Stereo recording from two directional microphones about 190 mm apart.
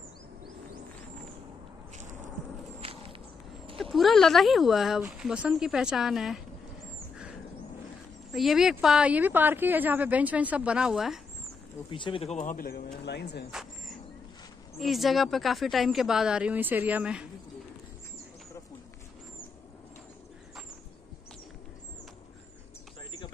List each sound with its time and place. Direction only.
3.9 s speech: centre (ahead or behind)
8.3 s speech: centre (ahead or behind)
11.9 s speech: 25° left (ahead or behind); by 13.5 s 60° left (ahead or behind)
13.5 s a sound: centre (ahead or behind)
14.8 s speech: centre (ahead or behind)